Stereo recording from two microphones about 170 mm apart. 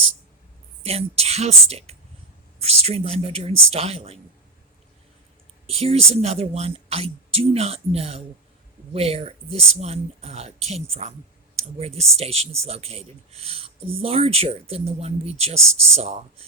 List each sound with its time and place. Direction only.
0.8 s speech: 35° right (ahead or behind)
5.6 s speech: 35° right (ahead or behind)